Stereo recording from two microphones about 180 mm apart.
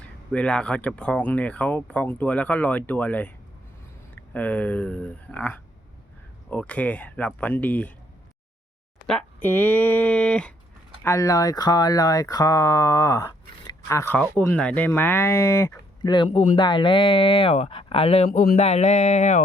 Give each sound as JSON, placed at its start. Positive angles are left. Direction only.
{"t": 0.0, "sound": "speech", "side_deg": 5}
{"t": 9.0, "sound": "speech", "side_deg": 10}
{"t": 11.0, "sound": "speech", "side_deg": 15}
{"t": 18.3, "sound": "a man's voice", "side_deg": 55}
{"t": 18.5, "sound": "speech", "side_deg": 40}